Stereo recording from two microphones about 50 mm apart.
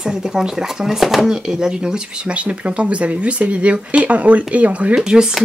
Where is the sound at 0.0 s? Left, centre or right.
Centre; by 5.0 s right.